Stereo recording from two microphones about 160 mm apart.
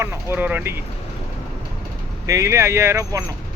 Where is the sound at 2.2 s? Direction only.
20° right (ahead or behind).